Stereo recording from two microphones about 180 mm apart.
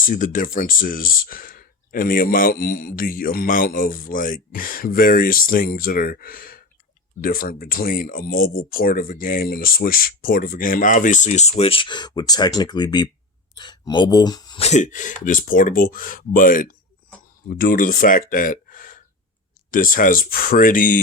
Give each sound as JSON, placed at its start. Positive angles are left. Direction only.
{"t": 0.0, "sound": "speech", "side_deg": 45}
{"t": 14.6, "sound": "speech", "side_deg": 40}